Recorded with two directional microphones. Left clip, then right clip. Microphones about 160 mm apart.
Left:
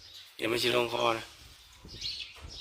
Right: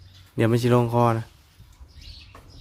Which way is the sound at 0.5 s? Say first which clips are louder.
Right 5 dB; 40° right (ahead or behind).